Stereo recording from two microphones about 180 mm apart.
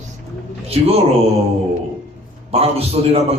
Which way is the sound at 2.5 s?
35° right (ahead or behind).